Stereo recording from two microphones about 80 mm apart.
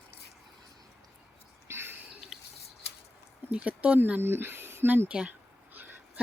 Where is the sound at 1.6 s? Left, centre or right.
Right.